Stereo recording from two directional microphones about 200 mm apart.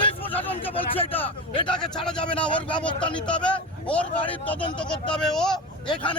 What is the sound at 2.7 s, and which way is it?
Speech, 25° left (ahead or behind).